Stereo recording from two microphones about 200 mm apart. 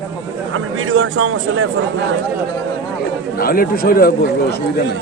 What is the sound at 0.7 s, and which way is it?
Speech, 80° right.